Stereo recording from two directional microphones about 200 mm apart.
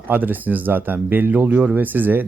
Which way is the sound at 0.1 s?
10° right (ahead or behind).